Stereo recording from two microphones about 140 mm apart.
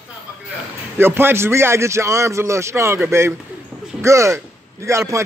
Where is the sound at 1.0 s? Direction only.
15° right (ahead or behind).